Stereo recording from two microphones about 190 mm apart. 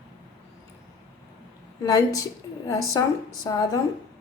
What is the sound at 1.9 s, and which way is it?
A woman's voice, 20° left (ahead or behind).